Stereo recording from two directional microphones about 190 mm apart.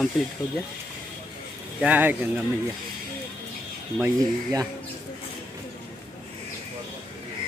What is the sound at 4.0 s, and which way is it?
Speech, 20° right (ahead or behind).